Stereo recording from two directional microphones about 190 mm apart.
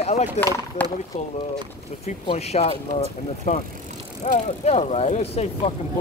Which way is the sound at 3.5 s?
45° left (ahead or behind).